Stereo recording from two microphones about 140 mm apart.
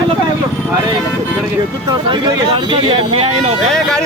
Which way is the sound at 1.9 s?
30° right (ahead or behind).